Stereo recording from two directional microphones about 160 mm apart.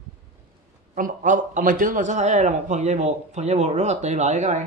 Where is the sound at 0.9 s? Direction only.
55° right (ahead or behind).